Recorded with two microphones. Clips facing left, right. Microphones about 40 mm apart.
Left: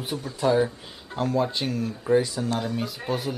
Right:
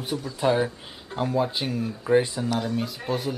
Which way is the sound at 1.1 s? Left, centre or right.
Centre.